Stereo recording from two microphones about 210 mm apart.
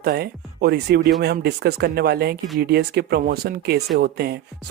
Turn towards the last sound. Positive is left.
turn(degrees=-50)  # may be behind; listen again after turning